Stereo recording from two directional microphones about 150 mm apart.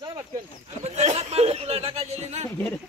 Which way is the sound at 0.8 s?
45° right (ahead or behind).